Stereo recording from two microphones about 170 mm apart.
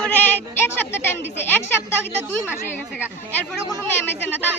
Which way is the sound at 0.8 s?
15° left (ahead or behind).